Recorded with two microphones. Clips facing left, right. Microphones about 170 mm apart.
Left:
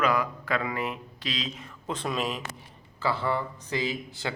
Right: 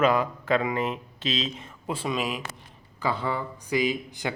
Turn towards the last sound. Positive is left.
turn(degrees=-15)  # may be behind; listen again after turning